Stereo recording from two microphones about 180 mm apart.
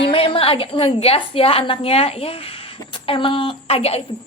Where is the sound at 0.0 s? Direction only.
30° left (ahead or behind).